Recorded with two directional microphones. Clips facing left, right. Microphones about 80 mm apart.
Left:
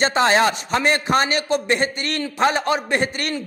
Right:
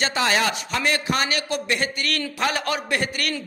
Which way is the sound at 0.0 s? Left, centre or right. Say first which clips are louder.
Left 5 dB; left.